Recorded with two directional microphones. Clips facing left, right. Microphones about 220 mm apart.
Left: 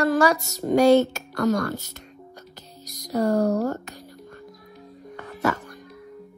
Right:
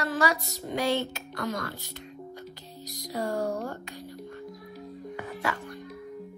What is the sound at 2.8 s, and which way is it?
Speech, 45° left (ahead or behind).